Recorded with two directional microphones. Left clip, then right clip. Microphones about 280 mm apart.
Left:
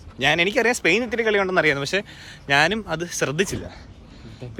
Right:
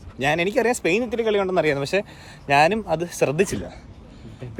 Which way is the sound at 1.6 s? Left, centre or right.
Centre.